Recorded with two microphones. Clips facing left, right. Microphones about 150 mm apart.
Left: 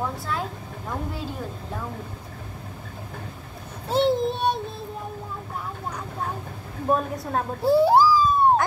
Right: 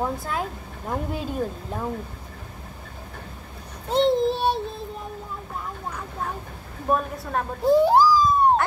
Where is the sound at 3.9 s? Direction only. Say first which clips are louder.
Right 1 dB; 5° left (ahead or behind).